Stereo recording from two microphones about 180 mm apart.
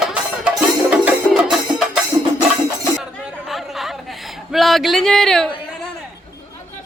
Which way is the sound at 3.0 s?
Centre (ahead or behind).